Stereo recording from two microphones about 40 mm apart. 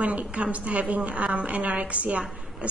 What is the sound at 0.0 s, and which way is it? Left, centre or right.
A woman's voice, right.